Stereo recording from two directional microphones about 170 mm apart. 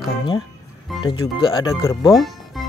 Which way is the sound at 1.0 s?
25° left (ahead or behind).